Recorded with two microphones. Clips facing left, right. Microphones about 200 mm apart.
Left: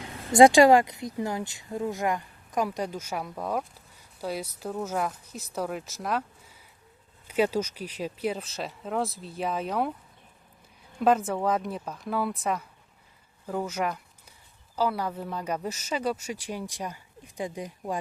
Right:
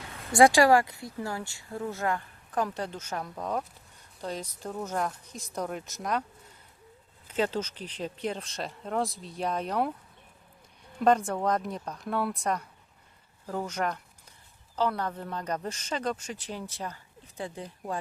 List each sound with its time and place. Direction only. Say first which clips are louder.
0.3 s speech: left 4 dB; 20° left (ahead or behind); by 6.2 s centre (ahead or behind)
7.3 s speech: left 4 dB; 10° left (ahead or behind)
11.0 s speech: left 1 dB; 5° left (ahead or behind)